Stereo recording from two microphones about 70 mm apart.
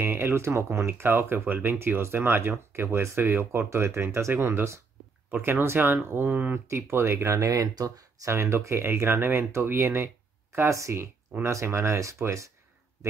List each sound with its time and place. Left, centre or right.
0.0 s speech: right
8.3 s speech: right